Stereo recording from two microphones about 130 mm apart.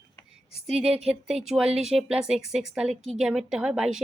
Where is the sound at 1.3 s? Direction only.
55° right (ahead or behind).